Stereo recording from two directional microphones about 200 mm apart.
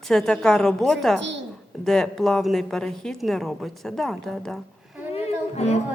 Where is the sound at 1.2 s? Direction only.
65° right (ahead or behind).